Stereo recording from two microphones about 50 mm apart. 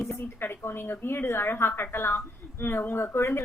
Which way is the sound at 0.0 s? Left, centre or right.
Left.